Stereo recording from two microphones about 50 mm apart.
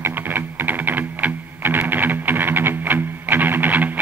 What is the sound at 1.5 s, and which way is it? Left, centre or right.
Music, right.